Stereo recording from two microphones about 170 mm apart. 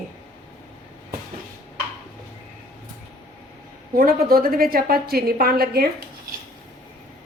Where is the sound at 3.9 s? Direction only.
60° right (ahead or behind).